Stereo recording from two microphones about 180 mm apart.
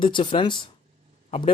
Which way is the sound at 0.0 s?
30° left (ahead or behind).